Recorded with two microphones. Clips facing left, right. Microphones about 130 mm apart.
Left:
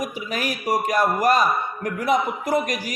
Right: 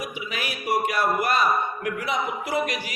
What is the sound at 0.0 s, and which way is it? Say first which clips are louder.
A man's voice: left 5 dB; 40° left (ahead or behind).